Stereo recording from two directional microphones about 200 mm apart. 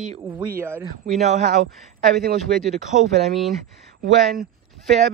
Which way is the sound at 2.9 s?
35° right (ahead or behind).